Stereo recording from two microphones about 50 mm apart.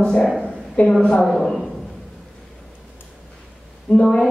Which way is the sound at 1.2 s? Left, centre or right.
Centre.